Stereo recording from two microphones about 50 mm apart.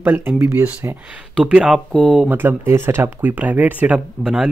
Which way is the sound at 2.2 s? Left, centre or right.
Right.